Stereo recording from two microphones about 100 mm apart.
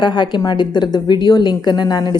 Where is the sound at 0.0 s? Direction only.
50° left (ahead or behind).